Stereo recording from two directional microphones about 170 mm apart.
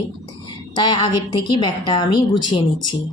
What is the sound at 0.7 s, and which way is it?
A woman's voice, 25° left (ahead or behind).